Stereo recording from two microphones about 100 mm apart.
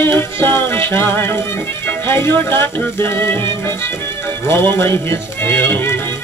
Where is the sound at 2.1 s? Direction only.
25° left (ahead or behind).